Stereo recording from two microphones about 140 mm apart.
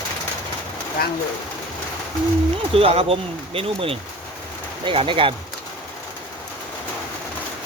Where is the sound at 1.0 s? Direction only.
90° left.